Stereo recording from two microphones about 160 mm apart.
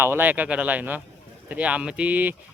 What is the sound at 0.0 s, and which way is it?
Speech, 15° right (ahead or behind).